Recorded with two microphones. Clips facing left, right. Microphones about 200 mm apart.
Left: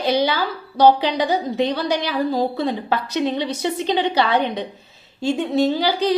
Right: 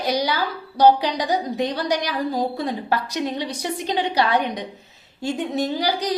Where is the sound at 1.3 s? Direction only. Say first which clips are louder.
Left 2 dB; 15° right (ahead or behind).